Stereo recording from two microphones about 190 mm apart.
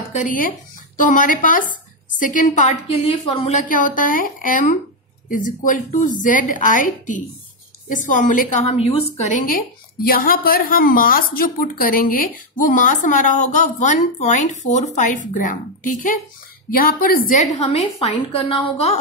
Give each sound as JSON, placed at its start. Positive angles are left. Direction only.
{"t": 0.1, "sound": "a woman's voice", "side_deg": 45}
{"t": 10.0, "sound": "a woman's voice", "side_deg": 50}